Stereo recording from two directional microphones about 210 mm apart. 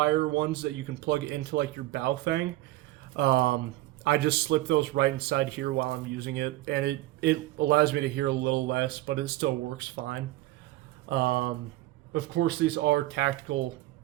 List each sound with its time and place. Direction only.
0.0 s speech: 55° right (ahead or behind)